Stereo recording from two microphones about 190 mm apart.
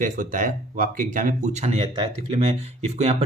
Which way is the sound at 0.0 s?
45° right (ahead or behind).